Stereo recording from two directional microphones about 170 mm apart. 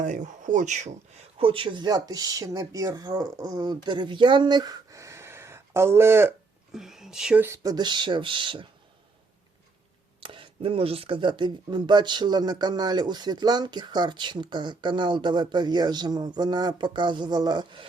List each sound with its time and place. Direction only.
0.0 s speech: 45° right (ahead or behind)
1.4 s speech: 35° right (ahead or behind); by 6.3 s 15° right (ahead or behind)
6.7 s speech: 5° right (ahead or behind); by 8.6 s 30° right (ahead or behind)
10.2 s speech: 30° right (ahead or behind)